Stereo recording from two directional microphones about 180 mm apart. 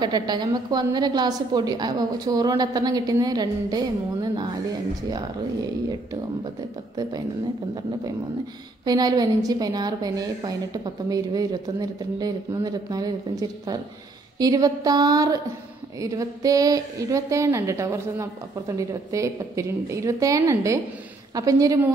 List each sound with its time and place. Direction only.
0.0 s a woman's voice: 25° right (ahead or behind)
8.8 s a woman's voice: 20° right (ahead or behind)